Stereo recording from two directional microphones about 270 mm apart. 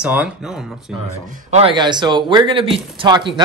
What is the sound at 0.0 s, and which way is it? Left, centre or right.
Speech, centre.